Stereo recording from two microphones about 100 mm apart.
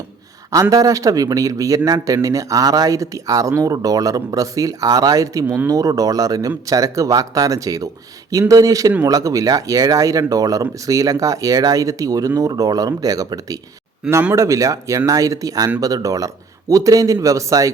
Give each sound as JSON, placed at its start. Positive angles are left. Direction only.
{"t": 0.5, "sound": "speech", "side_deg": -35}